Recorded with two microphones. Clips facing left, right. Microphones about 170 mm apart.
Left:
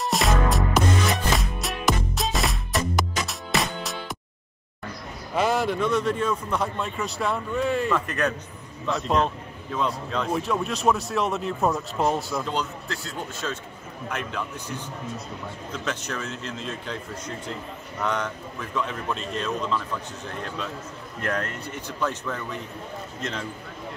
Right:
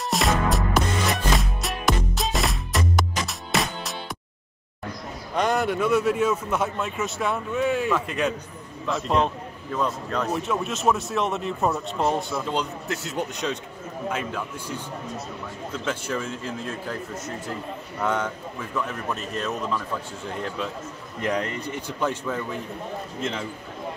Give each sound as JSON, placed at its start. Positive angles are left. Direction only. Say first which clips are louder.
{"t": 0.0, "sound": "music", "louder": "even", "side_deg": 0}
{"t": 5.3, "sound": "a man's voice", "louder": "even", "side_deg": 5}
{"t": 12.5, "sound": "speech", "louder": "right 2 dB", "side_deg": -20}
{"t": 15.8, "sound": "speech", "louder": "right 3 dB", "side_deg": -10}
{"t": 16.3, "sound": "speech", "louder": "right 2 dB", "side_deg": 85}
{"t": 18.0, "sound": "a man's voice", "louder": "right 2 dB", "side_deg": -10}
{"t": 21.2, "sound": "speech", "louder": "right 3 dB", "side_deg": -15}